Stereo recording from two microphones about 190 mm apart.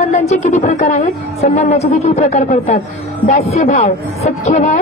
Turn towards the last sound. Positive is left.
turn(degrees=35)  # may be behind; listen again after turning